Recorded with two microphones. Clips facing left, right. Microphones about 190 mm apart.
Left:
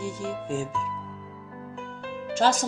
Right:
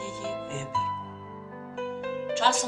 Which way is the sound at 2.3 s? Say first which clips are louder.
Left 4 dB; 40° left (ahead or behind).